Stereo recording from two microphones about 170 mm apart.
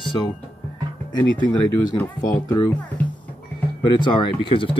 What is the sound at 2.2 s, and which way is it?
Speech, 20° left (ahead or behind).